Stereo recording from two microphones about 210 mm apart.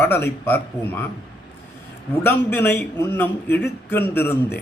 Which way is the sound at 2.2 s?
10° left (ahead or behind).